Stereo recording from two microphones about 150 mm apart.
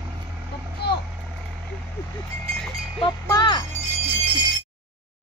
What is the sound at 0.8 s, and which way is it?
Vehicle, 90° left.